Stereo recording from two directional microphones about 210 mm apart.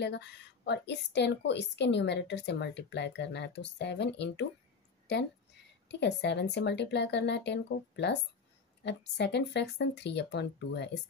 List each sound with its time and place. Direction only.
0.0 s a woman's voice: 55° left (ahead or behind)